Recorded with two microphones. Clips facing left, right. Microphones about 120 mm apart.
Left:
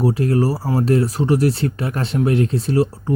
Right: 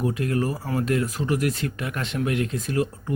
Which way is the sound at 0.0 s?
35° left (ahead or behind).